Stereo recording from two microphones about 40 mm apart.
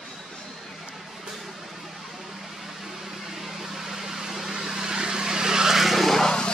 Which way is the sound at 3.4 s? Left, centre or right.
Centre.